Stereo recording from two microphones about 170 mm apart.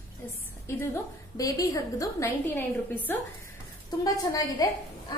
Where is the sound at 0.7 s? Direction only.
15° left (ahead or behind).